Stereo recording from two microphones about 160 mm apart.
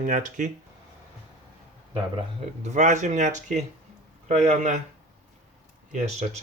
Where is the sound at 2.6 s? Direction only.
50° right (ahead or behind).